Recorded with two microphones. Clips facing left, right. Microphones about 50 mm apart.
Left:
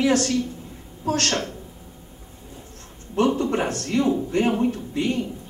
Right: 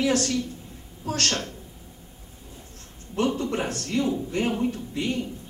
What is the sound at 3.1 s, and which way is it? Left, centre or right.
Speech, left.